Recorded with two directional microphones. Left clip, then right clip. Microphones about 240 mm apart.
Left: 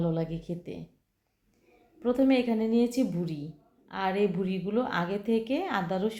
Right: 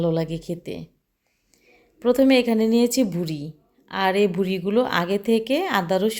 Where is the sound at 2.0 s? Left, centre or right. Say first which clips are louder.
Right 8 dB; right.